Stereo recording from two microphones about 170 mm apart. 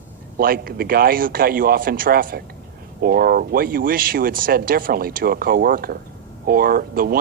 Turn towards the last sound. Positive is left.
turn(degrees=-60)  # may be behind; listen again after turning